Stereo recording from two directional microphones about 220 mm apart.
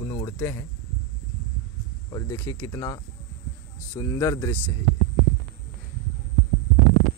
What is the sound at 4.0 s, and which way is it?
Speech, 15° left (ahead or behind).